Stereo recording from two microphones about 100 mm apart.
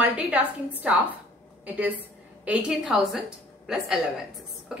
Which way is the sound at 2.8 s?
5° right (ahead or behind).